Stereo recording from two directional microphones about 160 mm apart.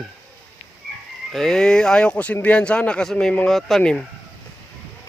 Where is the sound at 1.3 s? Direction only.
5° left (ahead or behind).